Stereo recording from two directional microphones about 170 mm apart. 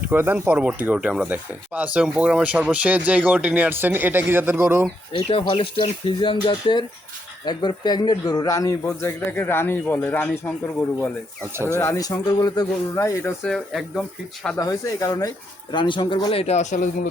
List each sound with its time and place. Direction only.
0.1 s speech: 10° right (ahead or behind)
5.1 s a man's voice: 30° left (ahead or behind); by 10.5 s 10° left (ahead or behind)
11.7 s speech: 15° left (ahead or behind)
13.4 s speech: centre (ahead or behind)
14.6 s speech: 20° left (ahead or behind); by 17.1 s 50° left (ahead or behind)